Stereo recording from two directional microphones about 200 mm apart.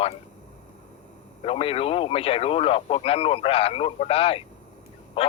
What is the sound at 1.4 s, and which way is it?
A man's voice, 30° left (ahead or behind).